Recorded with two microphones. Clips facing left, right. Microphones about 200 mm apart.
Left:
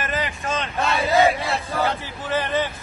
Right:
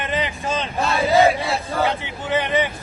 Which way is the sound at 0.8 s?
Centre (ahead or behind).